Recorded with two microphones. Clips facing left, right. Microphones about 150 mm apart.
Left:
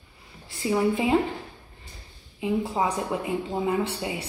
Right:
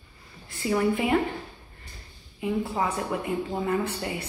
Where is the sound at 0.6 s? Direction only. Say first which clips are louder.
Left 1 dB; 15° left (ahead or behind).